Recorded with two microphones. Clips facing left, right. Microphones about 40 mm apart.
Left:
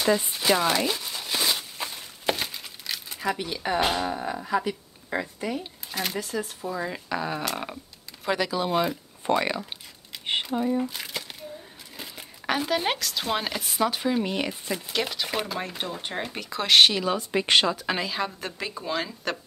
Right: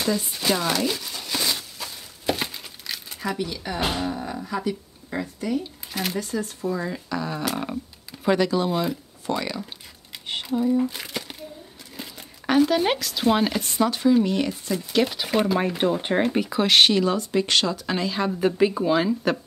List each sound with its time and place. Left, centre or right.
0.3 s a sound: centre
1.6 s a sound: left
2.3 s crumpling: centre
3.3 s speech: left
5.9 s speech: centre
6.9 s speech: centre
8.6 s speech: centre
9.2 s speech: left
10.9 s crumpling: centre
12.0 s speech: centre
14.9 s speech: centre
15.5 s speech: centre
16.5 s speech: centre
18.6 s speech: centre